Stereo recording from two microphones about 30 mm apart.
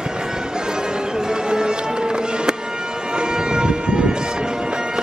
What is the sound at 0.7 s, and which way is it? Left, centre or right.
Music, right.